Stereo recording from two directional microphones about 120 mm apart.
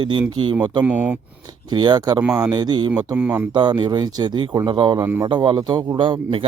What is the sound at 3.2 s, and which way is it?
Speech, 15° right (ahead or behind).